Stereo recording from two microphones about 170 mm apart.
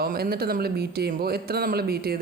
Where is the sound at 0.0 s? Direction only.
65° right (ahead or behind).